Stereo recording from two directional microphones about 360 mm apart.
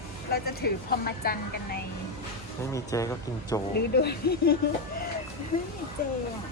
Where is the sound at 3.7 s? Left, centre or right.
Left.